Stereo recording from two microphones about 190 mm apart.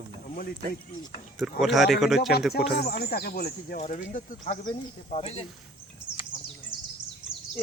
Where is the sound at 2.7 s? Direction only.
50° left (ahead or behind).